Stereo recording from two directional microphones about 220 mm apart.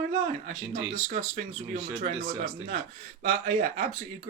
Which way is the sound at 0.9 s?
35° right (ahead or behind).